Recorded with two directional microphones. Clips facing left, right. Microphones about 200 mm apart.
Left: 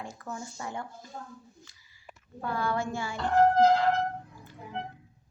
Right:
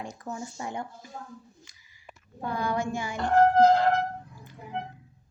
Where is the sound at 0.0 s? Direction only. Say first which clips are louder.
Right 3 dB; 20° right (ahead or behind).